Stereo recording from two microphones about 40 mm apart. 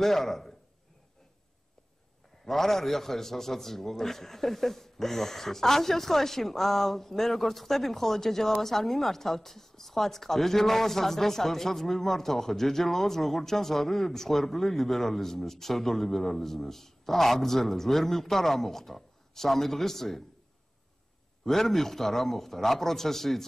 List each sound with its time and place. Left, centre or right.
0.0 s a man's voice: centre
2.4 s a man's voice: centre
21.5 s a man's voice: centre